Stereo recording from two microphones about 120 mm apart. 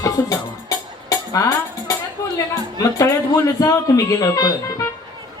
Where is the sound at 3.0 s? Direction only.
25° left (ahead or behind).